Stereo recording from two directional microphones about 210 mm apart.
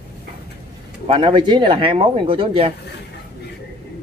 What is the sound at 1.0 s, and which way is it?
Speech, 25° right (ahead or behind).